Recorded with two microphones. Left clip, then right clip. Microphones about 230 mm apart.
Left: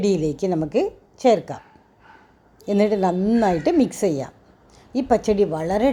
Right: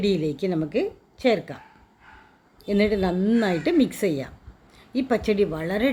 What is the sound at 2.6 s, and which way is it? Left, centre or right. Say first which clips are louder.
A woman's voice: left 3 dB; centre.